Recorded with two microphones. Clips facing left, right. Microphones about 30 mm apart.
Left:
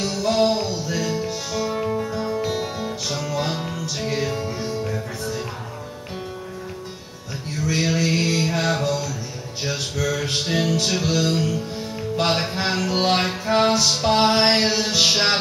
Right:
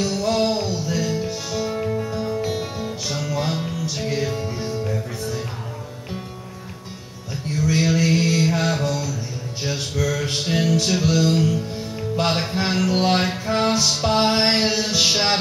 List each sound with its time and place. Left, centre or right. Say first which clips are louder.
0.2 s music: left 4 dB; centre
7.6 s mantra: right 2 dB; centre
9.6 s music: even; centre
13.5 s music: left 3 dB; centre